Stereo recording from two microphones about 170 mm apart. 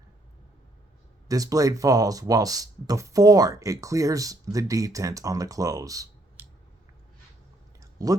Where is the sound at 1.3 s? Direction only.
20° right (ahead or behind).